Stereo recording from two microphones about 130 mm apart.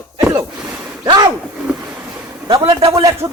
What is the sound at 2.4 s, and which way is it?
Speech, 30° right (ahead or behind).